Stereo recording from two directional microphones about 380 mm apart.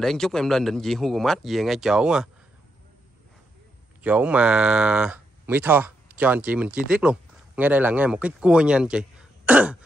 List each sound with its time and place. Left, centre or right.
0.0 s speech: centre
4.0 s speech: centre